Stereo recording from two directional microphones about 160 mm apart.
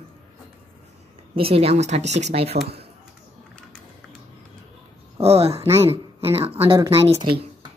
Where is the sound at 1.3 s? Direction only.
35° right (ahead or behind).